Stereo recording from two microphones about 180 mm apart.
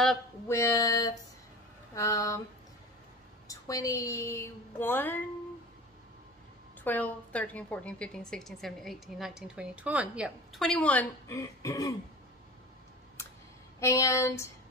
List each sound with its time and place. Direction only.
0.5 s a woman's voice: 15° left (ahead or behind)
3.4 s a woman's voice: 20° left (ahead or behind)
6.8 s a woman's voice: 10° left (ahead or behind)
13.7 s a woman's voice: 15° left (ahead or behind)